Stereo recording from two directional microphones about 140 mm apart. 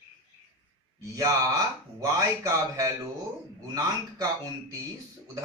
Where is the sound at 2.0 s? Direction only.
25° right (ahead or behind).